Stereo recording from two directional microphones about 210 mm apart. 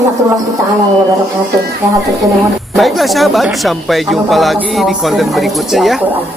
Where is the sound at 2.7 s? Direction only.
Centre (ahead or behind).